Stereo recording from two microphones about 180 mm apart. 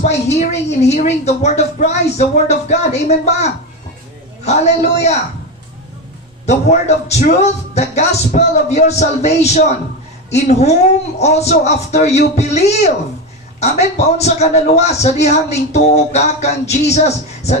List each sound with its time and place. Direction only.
0.0 s a woman's voice: 40° left (ahead or behind)
6.4 s a woman's voice: 40° left (ahead or behind)